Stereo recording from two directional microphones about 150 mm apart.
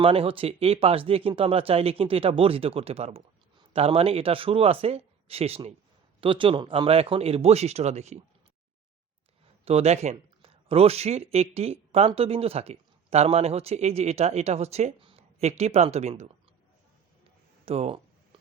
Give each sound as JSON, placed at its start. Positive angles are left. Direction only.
{"t": 0.0, "sound": "speech", "side_deg": -40}
{"t": 9.6, "sound": "speech", "side_deg": -45}
{"t": 17.7, "sound": "a sound", "side_deg": -40}